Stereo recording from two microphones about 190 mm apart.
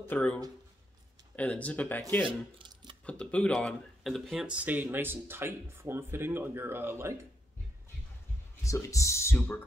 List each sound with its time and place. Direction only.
0.1 s speech: 5° left (ahead or behind)
2.2 s speech: 25° right (ahead or behind)
3.1 s speech: 5° left (ahead or behind); by 7.2 s 10° right (ahead or behind)
8.6 s speech: 15° left (ahead or behind)